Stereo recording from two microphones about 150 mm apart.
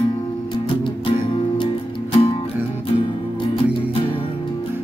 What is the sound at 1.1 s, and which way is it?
Music, 30° left (ahead or behind).